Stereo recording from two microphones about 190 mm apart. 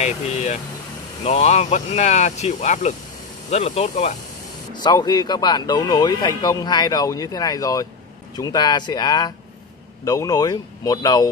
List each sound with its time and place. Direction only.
0.0 s speech: 35° left (ahead or behind)
4.7 s speech: 20° left (ahead or behind)